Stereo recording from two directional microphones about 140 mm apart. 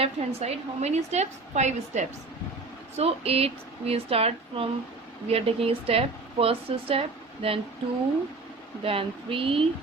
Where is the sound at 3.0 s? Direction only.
45° right (ahead or behind).